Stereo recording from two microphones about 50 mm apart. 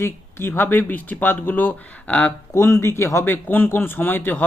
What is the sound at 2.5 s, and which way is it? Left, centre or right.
Speech, left.